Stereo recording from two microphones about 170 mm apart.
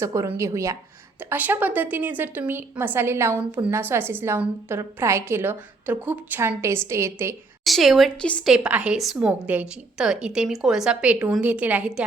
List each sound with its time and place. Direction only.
0.0 s a woman's voice: 20° right (ahead or behind)
7.6 s a woman's voice: centre (ahead or behind)
8.5 s a woman's voice: 5° right (ahead or behind)